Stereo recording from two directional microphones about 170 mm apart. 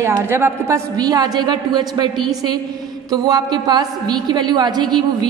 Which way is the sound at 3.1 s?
20° right (ahead or behind).